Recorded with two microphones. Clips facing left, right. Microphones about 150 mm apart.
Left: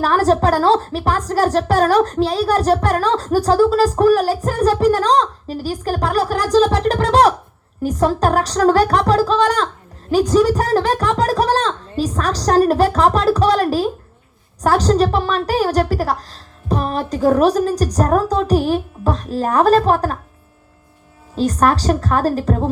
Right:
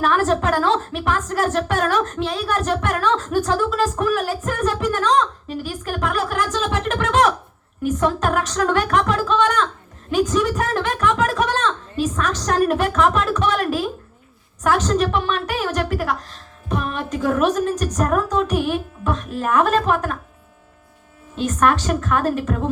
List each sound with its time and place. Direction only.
0.0 s a woman's voice: 35° left (ahead or behind)
21.3 s a woman's voice: 35° left (ahead or behind)